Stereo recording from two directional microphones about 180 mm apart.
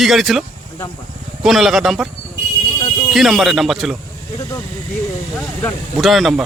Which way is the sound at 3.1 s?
Centre (ahead or behind).